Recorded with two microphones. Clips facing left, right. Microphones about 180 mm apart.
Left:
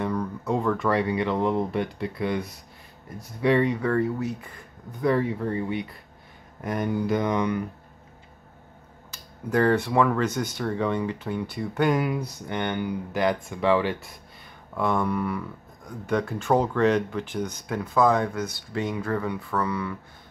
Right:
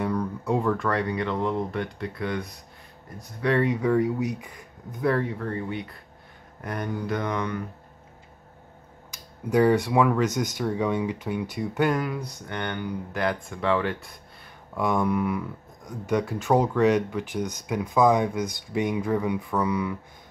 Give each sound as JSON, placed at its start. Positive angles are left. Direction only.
{"t": 0.0, "sound": "a sound", "side_deg": -5}
{"t": 0.8, "sound": "speech", "side_deg": 5}
{"t": 3.6, "sound": "speech", "side_deg": -10}
{"t": 5.4, "sound": "speech", "side_deg": 15}
{"t": 9.1, "sound": "speech", "side_deg": -10}
{"t": 11.9, "sound": "speech", "side_deg": 10}
{"t": 14.7, "sound": "speech", "side_deg": -10}